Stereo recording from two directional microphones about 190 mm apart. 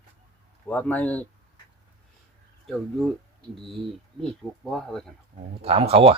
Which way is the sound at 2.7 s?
Centre (ahead or behind).